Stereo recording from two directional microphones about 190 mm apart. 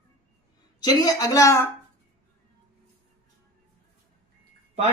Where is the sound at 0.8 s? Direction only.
20° left (ahead or behind).